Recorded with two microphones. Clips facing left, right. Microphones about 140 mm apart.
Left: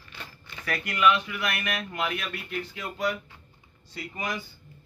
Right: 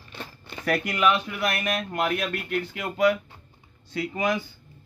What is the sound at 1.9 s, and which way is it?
Speech, 50° right (ahead or behind).